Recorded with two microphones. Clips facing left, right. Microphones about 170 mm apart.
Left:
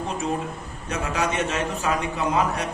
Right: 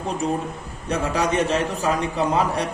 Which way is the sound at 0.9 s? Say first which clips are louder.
Right 4 dB; 35° right (ahead or behind).